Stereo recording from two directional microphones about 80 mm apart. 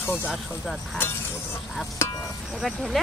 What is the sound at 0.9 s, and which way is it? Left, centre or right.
Speech, left.